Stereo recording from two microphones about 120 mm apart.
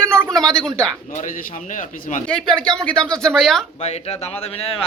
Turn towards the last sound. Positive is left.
turn(degrees=55)  # may be behind; listen again after turning